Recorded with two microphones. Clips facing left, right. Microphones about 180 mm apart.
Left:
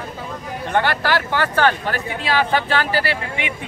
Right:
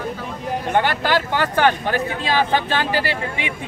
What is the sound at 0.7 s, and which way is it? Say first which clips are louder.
Speech: even; 15° right (ahead or behind).